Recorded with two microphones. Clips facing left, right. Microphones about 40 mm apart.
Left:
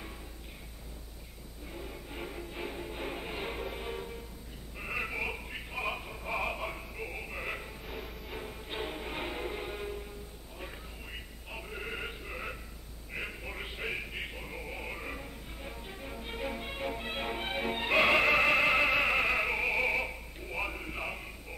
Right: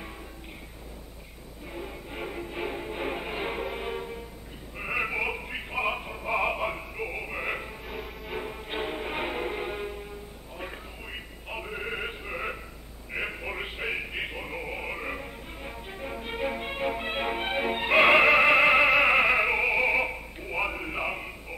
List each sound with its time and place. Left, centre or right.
1.7 s music: right
4.7 s synthetic singing: right
8.4 s music: right
11.5 s a sound: right
19.0 s opera: right